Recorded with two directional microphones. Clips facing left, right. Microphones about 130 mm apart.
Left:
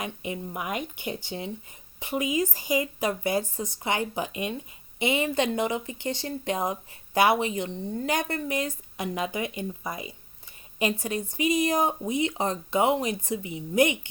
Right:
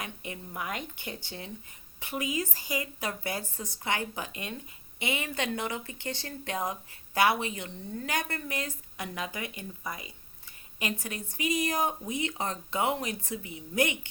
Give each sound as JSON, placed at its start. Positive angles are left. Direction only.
{"t": 0.0, "sound": "speech", "side_deg": 15}